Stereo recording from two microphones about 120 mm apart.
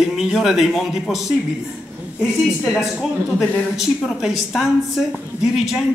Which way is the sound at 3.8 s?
5° right (ahead or behind).